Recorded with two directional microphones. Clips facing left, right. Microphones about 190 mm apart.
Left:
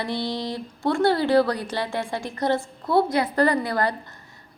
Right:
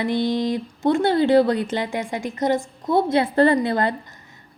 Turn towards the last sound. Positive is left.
turn(degrees=-20)  # may be behind; listen again after turning